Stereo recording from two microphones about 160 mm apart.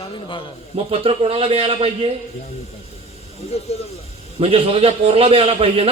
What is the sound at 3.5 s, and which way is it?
Speech, 40° left (ahead or behind).